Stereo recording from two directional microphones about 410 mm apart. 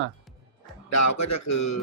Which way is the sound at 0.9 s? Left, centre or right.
Left.